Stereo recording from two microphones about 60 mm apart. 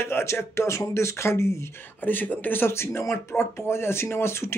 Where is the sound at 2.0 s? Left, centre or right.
Left.